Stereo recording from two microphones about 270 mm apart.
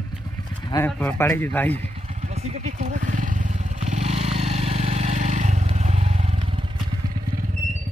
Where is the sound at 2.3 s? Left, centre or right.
Right.